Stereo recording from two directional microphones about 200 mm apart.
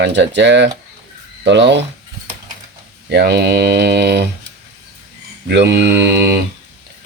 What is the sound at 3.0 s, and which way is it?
Speech, 55° right (ahead or behind).